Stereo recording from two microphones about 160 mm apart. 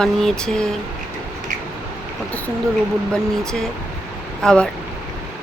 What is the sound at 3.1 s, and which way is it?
A woman's voice, 5° left (ahead or behind).